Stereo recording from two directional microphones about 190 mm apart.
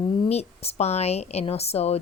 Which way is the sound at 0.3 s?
35° left (ahead or behind).